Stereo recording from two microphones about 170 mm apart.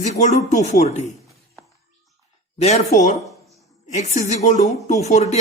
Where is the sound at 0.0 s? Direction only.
45° left (ahead or behind).